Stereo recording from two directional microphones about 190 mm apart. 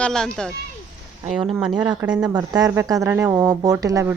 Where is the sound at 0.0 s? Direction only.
5° left (ahead or behind).